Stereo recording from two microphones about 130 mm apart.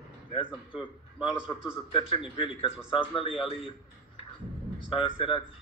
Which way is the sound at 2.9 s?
45° left (ahead or behind).